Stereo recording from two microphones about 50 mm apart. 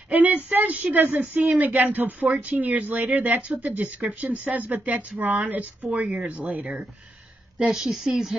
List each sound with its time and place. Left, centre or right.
0.1 s speech: right
2.2 s speech: right
7.6 s speech: centre